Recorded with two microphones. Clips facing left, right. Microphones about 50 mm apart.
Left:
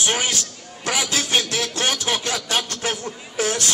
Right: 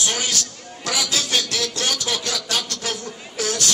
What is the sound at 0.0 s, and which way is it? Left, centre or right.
A man's voice, left.